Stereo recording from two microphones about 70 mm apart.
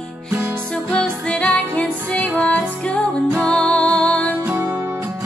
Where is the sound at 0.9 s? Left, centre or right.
Centre.